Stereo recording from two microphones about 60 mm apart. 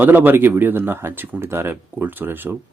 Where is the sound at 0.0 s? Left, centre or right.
Right.